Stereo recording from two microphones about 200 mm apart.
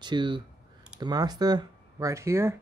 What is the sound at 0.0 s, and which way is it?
Speech, 25° right (ahead or behind).